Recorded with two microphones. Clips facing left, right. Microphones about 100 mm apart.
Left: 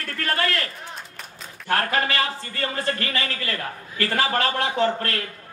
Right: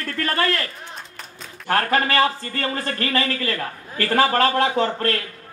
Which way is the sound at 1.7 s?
35° right (ahead or behind).